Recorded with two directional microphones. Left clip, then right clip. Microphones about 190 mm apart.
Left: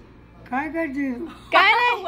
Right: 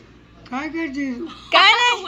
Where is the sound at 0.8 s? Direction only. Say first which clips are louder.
Right 1 dB; 5° left (ahead or behind).